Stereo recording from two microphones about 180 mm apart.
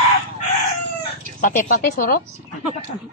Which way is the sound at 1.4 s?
45° left (ahead or behind).